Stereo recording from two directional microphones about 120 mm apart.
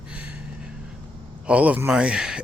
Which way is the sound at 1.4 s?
10° right (ahead or behind).